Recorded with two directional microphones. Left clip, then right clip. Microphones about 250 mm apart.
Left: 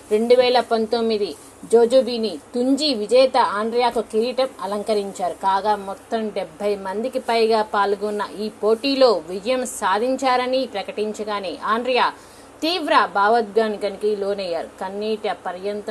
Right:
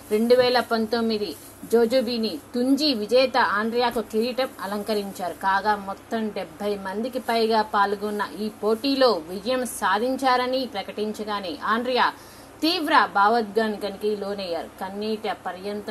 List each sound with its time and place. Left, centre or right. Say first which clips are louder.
0.1 s a woman's voice: left 3 dB; centre
7.0 s a woman's voice: left 4 dB; centre
7.2 s a woman's voice: left 3 dB; centre